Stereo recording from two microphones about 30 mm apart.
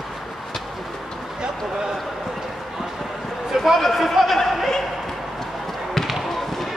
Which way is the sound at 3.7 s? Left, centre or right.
Centre.